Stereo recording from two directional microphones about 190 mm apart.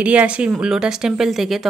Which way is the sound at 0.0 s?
5° right (ahead or behind).